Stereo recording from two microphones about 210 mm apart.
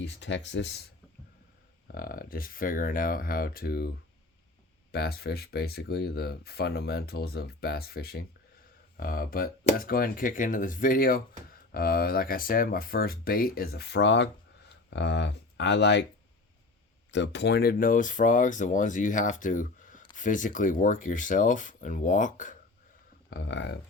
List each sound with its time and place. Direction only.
0.0 s speech: 60° left (ahead or behind)
2.0 s speech: 45° left (ahead or behind)
4.9 s speech: 50° left (ahead or behind)
17.1 s speech: 60° left (ahead or behind); by 22.5 s 35° left (ahead or behind)
23.3 s speech: 60° left (ahead or behind)